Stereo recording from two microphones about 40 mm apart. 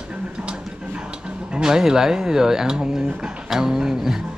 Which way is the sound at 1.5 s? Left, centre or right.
Centre.